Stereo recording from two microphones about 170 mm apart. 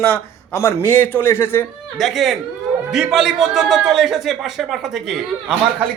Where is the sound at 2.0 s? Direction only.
Centre (ahead or behind).